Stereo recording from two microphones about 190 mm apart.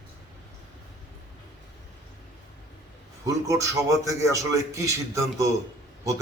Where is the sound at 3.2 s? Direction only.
15° right (ahead or behind).